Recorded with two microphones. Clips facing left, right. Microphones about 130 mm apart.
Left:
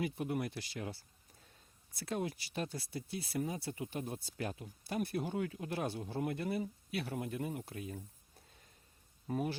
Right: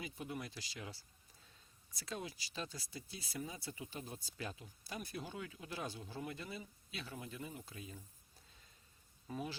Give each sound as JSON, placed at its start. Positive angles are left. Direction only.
{"t": 0.0, "sound": "speech", "side_deg": 60}
{"t": 9.2, "sound": "speech", "side_deg": 55}